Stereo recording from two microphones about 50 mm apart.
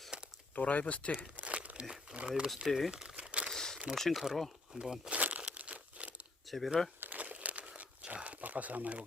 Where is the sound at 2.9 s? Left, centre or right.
Centre.